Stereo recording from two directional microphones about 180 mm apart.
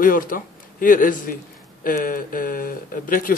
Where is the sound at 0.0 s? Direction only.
50° left (ahead or behind).